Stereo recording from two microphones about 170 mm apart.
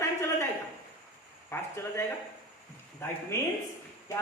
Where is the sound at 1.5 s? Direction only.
15° left (ahead or behind).